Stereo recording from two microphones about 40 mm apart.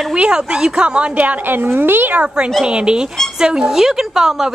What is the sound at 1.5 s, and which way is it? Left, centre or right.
Speech, right.